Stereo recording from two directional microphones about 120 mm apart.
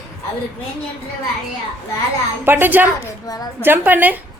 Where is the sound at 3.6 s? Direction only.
15° right (ahead or behind).